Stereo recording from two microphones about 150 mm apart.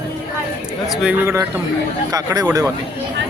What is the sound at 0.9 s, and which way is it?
Speech, 5° right (ahead or behind).